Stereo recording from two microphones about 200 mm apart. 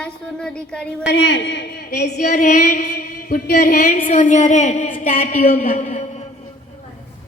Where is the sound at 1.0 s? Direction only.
60° left (ahead or behind).